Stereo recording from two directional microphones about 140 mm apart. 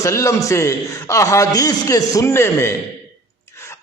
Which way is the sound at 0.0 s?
20° left (ahead or behind).